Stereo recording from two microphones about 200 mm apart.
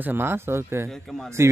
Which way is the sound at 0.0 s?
10° right (ahead or behind).